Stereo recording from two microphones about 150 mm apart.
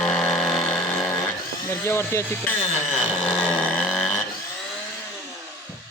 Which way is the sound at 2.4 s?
10° left (ahead or behind).